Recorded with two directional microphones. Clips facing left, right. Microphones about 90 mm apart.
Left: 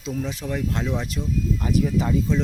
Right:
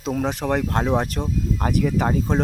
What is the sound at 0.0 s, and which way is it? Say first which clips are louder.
Speech: right 5 dB; 60° right (ahead or behind).